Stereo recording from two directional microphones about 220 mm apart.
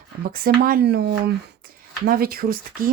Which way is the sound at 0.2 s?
40° right (ahead or behind).